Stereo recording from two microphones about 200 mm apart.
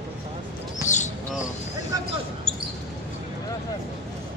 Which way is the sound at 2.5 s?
25° right (ahead or behind).